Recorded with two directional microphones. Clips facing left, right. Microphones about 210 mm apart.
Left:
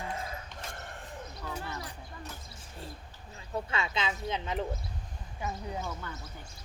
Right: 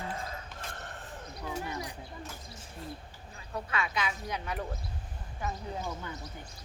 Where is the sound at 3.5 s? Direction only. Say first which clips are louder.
Left 1 dB; 25° left (ahead or behind).